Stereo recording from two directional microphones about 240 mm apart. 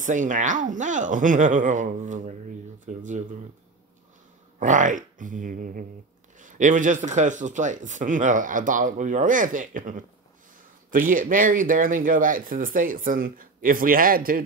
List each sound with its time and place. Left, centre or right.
0.0 s a man's voice: right
4.6 s a man's voice: right